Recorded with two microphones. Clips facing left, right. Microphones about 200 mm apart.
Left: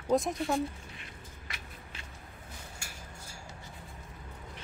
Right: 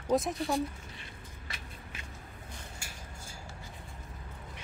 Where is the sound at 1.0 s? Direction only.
30° right (ahead or behind).